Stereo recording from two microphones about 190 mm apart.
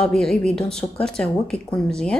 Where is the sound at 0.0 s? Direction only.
5° left (ahead or behind).